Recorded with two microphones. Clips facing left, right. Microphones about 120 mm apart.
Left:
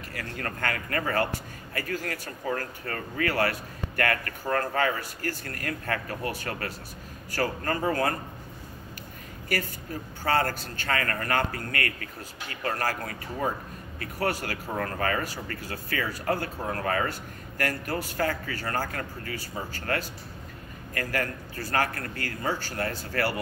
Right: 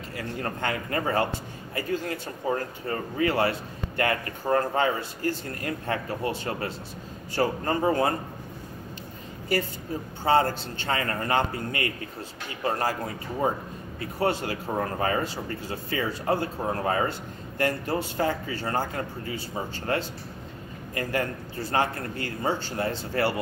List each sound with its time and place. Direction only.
0.1 s a man's voice: 20° right (ahead or behind)
9.5 s a man's voice: 25° right (ahead or behind)